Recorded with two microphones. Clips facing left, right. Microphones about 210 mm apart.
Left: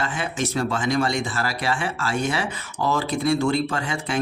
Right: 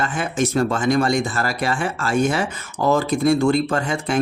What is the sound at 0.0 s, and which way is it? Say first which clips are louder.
Speech: right 4 dB; 50° right (ahead or behind).